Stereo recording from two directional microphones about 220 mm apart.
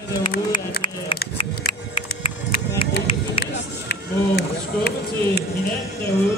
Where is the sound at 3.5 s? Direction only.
45° left (ahead or behind).